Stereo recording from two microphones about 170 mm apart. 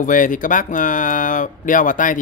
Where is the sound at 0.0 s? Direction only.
50° left (ahead or behind).